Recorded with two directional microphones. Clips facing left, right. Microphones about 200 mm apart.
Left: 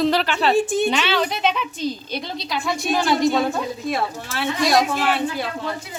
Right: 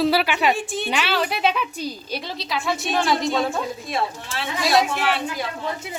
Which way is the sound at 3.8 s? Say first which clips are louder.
Left 6 dB; 55° left (ahead or behind).